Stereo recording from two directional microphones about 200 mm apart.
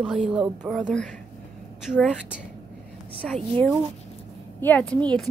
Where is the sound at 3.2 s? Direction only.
5° left (ahead or behind).